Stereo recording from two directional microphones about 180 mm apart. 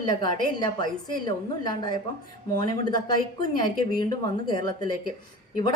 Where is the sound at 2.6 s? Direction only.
20° left (ahead or behind).